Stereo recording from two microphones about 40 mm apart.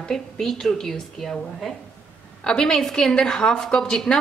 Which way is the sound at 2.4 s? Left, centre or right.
Centre.